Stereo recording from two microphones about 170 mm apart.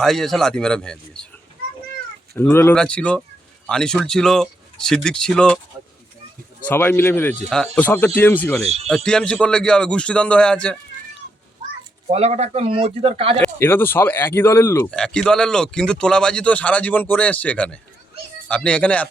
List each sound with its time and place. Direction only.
0.0 s speech: centre (ahead or behind)
2.3 s speech: 15° left (ahead or behind)
6.7 s speech: 10° left (ahead or behind)
12.0 s speech: 40° right (ahead or behind)
13.6 s speech: 15° left (ahead or behind)